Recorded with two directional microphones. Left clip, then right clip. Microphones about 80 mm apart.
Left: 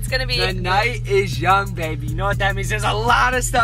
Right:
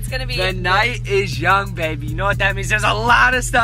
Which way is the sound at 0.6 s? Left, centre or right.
Centre.